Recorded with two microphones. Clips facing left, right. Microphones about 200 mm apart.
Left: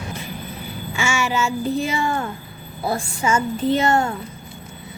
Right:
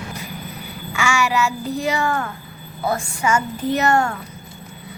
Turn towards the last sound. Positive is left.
turn(degrees=25)  # may be behind; listen again after turning